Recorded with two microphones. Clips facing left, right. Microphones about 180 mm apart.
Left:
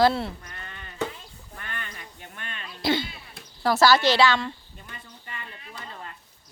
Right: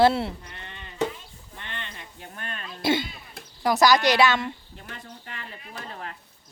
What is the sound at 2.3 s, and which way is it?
Throat clearing, 40° right (ahead or behind).